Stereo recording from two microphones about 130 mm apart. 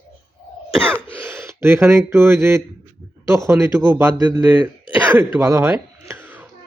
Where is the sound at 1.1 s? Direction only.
20° right (ahead or behind).